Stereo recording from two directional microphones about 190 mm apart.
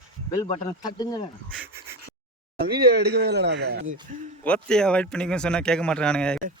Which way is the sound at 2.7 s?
55° right (ahead or behind).